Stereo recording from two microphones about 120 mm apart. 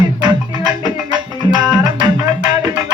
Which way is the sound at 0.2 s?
40° right (ahead or behind).